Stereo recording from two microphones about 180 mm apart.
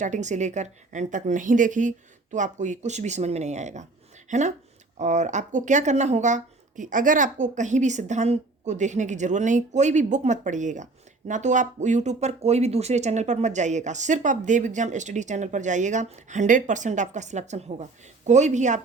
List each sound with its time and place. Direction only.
0.0 s speech: 40° right (ahead or behind)